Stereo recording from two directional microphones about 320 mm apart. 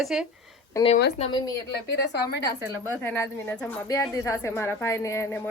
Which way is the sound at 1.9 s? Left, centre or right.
Left.